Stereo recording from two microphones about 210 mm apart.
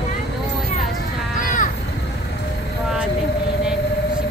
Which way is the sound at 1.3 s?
40° left (ahead or behind).